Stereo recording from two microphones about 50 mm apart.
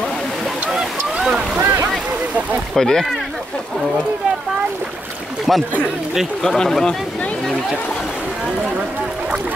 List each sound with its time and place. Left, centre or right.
1.2 s boat: centre
1.6 s boat: right
2.7 s speech: centre
5.5 s speech: centre